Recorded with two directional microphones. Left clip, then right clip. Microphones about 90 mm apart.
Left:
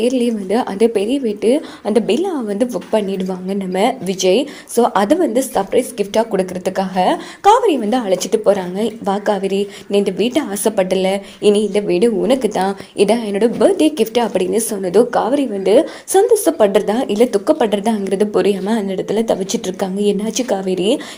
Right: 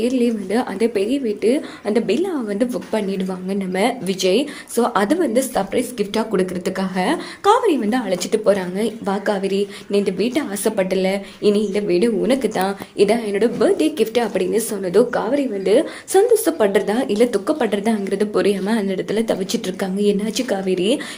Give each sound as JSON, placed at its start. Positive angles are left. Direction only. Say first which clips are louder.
{"t": 0.0, "sound": "a woman's voice", "louder": "left 3 dB", "side_deg": 50}
{"t": 5.1, "sound": "a woman's voice", "louder": "left 3 dB", "side_deg": 20}
{"t": 9.9, "sound": "a woman's voice", "louder": "left 4 dB", "side_deg": 40}
{"t": 13.0, "sound": "a woman's voice", "louder": "left 2 dB", "side_deg": 45}
{"t": 17.4, "sound": "a woman's voice", "louder": "left 5 dB", "side_deg": 45}
{"t": 18.3, "sound": "a woman's voice", "louder": "left 3 dB", "side_deg": 25}
{"t": 20.0, "sound": "a woman's voice", "louder": "left 1 dB", "side_deg": 35}